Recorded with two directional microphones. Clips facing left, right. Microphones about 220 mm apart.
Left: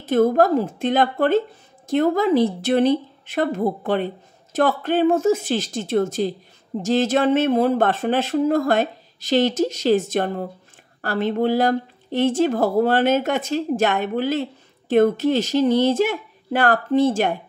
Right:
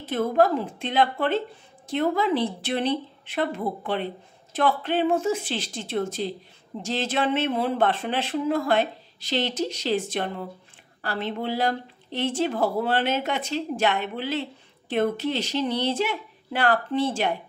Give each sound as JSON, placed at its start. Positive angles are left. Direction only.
{"t": 0.0, "sound": "speech", "side_deg": 45}